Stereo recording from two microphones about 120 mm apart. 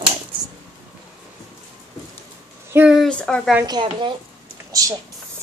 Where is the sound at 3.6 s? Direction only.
35° right (ahead or behind).